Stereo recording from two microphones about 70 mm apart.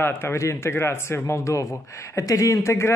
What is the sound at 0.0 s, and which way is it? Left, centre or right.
Speech, left.